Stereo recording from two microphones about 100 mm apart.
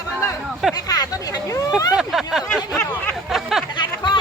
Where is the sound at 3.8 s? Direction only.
50° left (ahead or behind).